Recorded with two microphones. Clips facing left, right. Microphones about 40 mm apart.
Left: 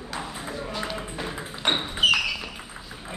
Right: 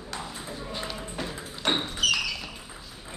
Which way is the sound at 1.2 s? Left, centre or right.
Left.